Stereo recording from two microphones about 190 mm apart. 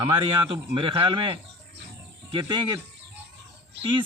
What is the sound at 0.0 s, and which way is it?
Speech, 25° right (ahead or behind).